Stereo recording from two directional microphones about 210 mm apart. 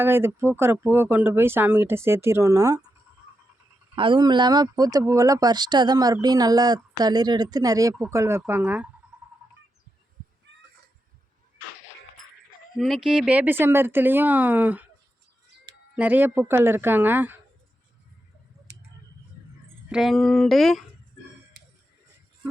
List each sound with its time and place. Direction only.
0.0 s speech: 10° right (ahead or behind)
3.9 s speech: 25° right (ahead or behind); by 8.9 s 10° right (ahead or behind)
9.1 s a sound: 5° right (ahead or behind)
10.5 s a sound: 55° right (ahead or behind)
12.7 s speech: centre (ahead or behind)
16.0 s speech: 10° right (ahead or behind)
19.9 s speech: centre (ahead or behind)